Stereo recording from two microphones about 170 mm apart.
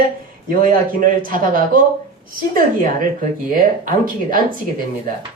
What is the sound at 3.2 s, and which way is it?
A woman's voice, 55° right (ahead or behind).